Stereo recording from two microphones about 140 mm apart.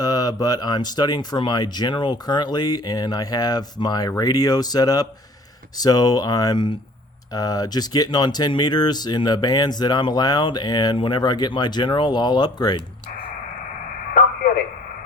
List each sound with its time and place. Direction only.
0.0 s speech: 25° left (ahead or behind)